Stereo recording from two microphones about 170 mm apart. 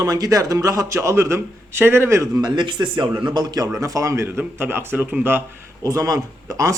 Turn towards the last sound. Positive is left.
turn(degrees=-20)  # may be behind; listen again after turning